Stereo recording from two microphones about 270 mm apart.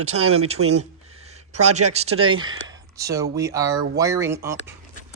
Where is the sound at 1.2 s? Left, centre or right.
Right.